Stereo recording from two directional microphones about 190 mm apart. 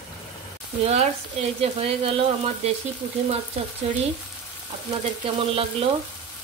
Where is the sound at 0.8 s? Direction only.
30° right (ahead or behind).